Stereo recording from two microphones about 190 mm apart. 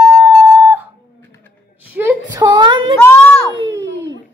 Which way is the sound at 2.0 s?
15° right (ahead or behind).